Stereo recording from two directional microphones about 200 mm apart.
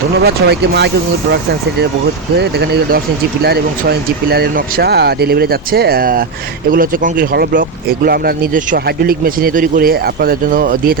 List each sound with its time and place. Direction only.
0.2 s speech: 55° right (ahead or behind)
2.4 s speech: 50° right (ahead or behind)